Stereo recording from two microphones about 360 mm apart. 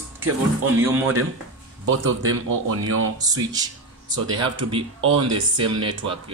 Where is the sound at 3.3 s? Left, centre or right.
Centre.